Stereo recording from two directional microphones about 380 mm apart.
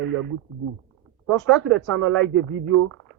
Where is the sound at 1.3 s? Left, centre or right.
Centre.